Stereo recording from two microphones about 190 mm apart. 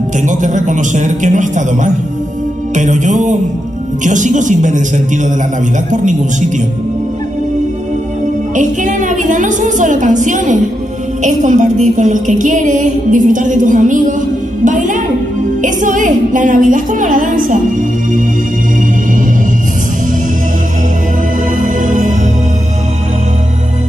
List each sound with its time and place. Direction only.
0.2 s a man's voice: 40° right (ahead or behind)
8.5 s a woman's voice: 40° right (ahead or behind)
21.5 s music: 40° right (ahead or behind)